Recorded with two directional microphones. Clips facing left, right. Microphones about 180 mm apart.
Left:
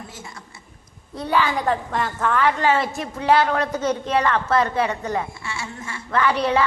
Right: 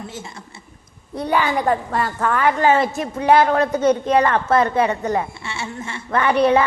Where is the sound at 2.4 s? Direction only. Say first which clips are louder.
Right 4 dB; 45° right (ahead or behind).